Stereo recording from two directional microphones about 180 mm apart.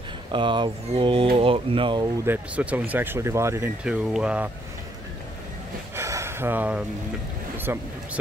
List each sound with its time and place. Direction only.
0.3 s speech: 25° right (ahead or behind)
2.2 s speech: 10° right (ahead or behind)
5.9 s a sound: 15° right (ahead or behind)
7.5 s speech: 10° right (ahead or behind)